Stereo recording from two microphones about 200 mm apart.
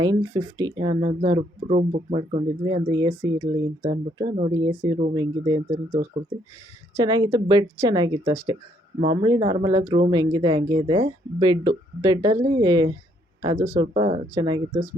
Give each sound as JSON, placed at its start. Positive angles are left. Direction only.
{"t": 0.0, "sound": "speech", "side_deg": -20}
{"t": 1.4, "sound": "speech", "side_deg": -35}
{"t": 6.2, "sound": "speech", "side_deg": -35}
{"t": 6.9, "sound": "speech", "side_deg": -20}